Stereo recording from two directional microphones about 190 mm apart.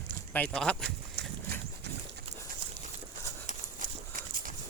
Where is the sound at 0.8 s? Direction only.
60° right (ahead or behind).